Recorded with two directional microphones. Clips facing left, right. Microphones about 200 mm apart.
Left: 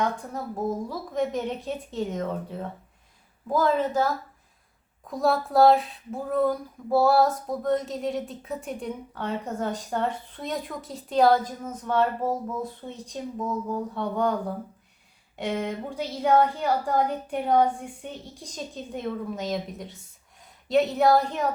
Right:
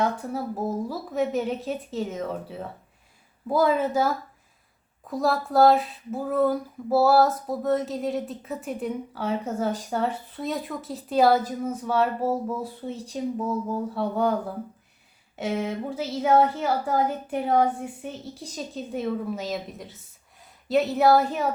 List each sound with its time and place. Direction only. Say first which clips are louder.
0.0 s a woman's voice: right 2 dB; 10° right (ahead or behind)